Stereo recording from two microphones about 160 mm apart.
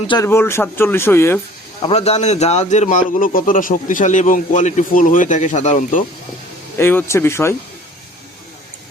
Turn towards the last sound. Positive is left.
turn(degrees=15)  # may be behind; listen again after turning